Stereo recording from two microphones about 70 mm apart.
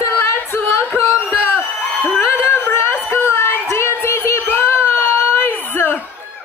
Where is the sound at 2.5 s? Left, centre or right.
Left.